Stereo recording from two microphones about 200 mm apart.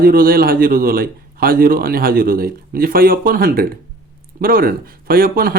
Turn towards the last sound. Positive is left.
turn(degrees=-45)  # may be behind; listen again after turning